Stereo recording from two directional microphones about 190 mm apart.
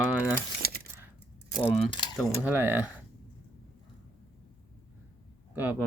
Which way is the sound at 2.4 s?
10° right (ahead or behind).